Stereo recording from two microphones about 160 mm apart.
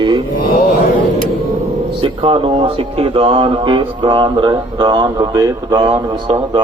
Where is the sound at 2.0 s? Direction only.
35° right (ahead or behind).